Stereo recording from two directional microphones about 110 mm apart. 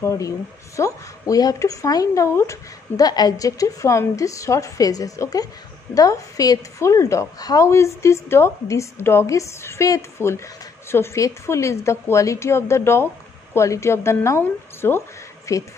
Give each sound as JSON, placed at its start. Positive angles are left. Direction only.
{"t": 0.7, "sound": "a woman's voice", "side_deg": 30}